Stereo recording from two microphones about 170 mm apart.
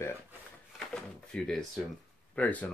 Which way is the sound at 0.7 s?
5° left (ahead or behind).